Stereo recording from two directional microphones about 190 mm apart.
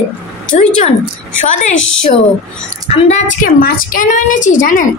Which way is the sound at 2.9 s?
35° left (ahead or behind).